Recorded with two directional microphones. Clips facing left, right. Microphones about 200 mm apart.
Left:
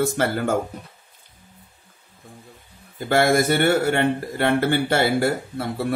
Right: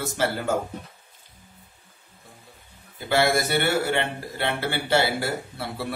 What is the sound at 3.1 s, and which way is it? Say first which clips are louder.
Speech: left 4 dB; 50° left (ahead or behind).